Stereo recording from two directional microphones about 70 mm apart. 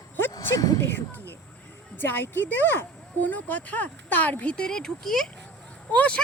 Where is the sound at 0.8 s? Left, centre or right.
Left.